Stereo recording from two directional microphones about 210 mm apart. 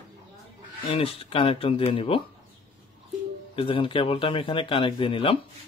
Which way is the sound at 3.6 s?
25° left (ahead or behind).